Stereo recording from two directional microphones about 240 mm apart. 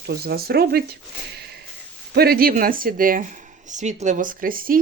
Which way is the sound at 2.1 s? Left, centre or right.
Right.